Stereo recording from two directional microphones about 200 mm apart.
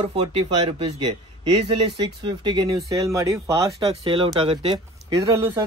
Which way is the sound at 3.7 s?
25° right (ahead or behind).